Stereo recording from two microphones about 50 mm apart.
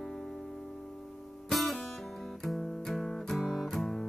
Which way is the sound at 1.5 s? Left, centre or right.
Centre.